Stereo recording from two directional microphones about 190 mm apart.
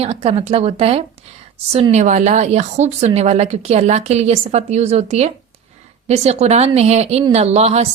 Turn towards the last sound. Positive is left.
turn(degrees=-35)  # may be behind; listen again after turning